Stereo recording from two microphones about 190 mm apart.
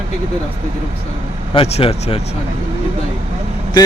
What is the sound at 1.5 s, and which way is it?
Speech, 30° left (ahead or behind).